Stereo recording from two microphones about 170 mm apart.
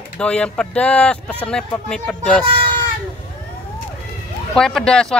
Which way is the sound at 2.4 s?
30° right (ahead or behind).